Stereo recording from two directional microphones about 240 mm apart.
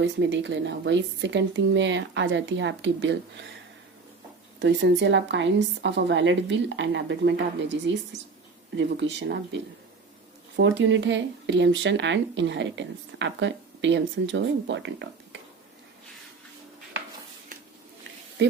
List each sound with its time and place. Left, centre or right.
0.0 s speech: right
4.6 s speech: right
10.6 s speech: right